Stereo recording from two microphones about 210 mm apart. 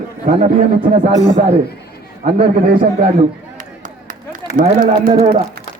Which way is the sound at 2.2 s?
45° right (ahead or behind).